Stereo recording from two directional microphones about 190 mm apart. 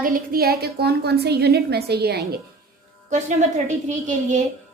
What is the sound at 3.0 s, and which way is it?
A woman's voice, 40° right (ahead or behind).